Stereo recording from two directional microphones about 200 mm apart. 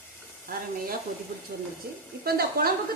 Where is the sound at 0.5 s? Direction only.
45° right (ahead or behind).